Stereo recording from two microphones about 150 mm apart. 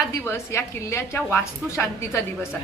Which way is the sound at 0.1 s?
20° left (ahead or behind).